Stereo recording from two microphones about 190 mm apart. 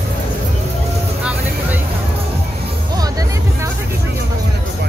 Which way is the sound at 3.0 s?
20° right (ahead or behind).